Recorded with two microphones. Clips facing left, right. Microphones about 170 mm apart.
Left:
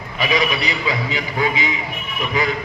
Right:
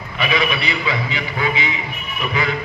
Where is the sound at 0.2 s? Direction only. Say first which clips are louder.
Left 1 dB; 40° left (ahead or behind).